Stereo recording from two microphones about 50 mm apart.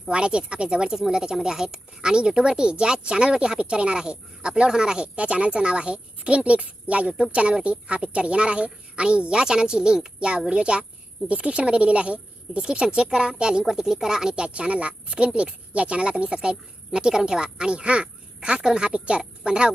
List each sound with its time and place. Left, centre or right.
0.1 s speech: centre